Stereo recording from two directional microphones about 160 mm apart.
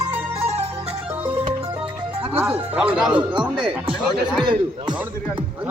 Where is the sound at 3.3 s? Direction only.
30° right (ahead or behind).